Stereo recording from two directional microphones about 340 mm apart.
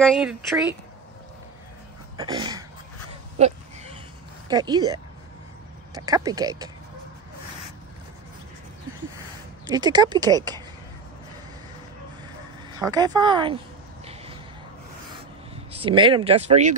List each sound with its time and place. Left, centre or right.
0.0 s speech: centre
2.1 s speech: centre
3.3 s a sound: centre
4.5 s speech: centre
9.7 s speech: centre
12.7 s speech: centre
14.0 s a sound: centre
15.7 s speech: centre